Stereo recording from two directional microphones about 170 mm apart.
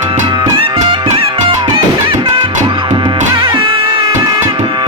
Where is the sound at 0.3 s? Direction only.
30° right (ahead or behind).